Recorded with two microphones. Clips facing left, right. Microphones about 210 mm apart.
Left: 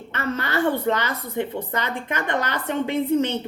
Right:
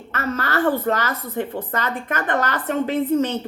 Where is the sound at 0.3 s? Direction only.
20° left (ahead or behind).